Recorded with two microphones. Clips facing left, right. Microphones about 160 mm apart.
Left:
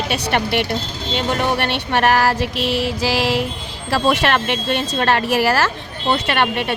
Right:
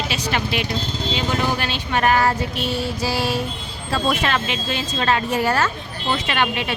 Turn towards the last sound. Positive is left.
turn(degrees=55)  # may be behind; listen again after turning